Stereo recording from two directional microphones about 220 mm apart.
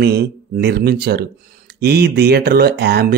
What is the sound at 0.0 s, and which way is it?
A man's voice, 45° right (ahead or behind).